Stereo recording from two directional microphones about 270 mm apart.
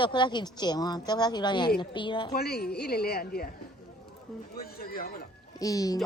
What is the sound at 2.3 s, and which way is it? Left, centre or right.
A woman's voice, left.